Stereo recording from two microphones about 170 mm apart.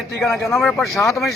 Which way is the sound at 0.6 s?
Centre (ahead or behind).